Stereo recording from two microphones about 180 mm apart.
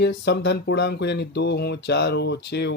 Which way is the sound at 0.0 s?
70° left (ahead or behind).